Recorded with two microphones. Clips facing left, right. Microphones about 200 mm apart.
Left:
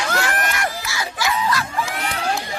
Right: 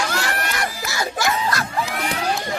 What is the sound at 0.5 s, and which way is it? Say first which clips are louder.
Music: even; 40° right (ahead or behind).